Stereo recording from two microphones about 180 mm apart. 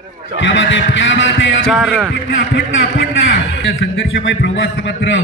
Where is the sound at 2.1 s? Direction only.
85° left.